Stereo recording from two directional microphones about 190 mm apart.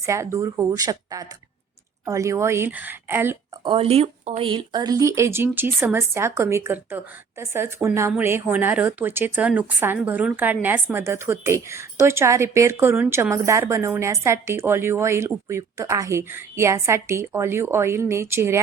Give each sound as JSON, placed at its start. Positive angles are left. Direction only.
{"t": 0.0, "sound": "speech", "side_deg": -15}
{"t": 3.6, "sound": "speech", "side_deg": -30}